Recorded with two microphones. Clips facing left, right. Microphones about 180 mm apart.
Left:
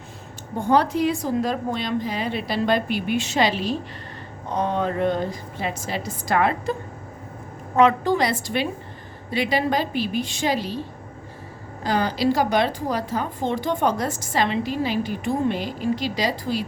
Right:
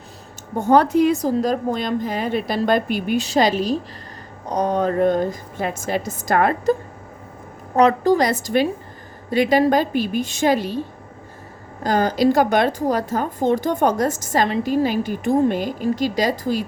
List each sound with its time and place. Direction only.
0.6 s a woman's voice: 50° right (ahead or behind)
7.8 s a woman's voice: 40° right (ahead or behind)
11.8 s a woman's voice: 45° right (ahead or behind)